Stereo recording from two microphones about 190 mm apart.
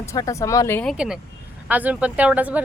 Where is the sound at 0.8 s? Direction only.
5° right (ahead or behind).